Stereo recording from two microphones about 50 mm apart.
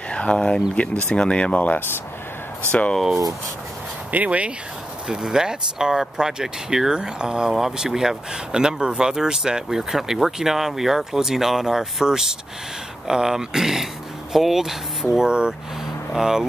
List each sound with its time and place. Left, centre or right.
0.1 s speech: left
4.1 s speech: right
5.0 s speech: centre
15.0 s speech: centre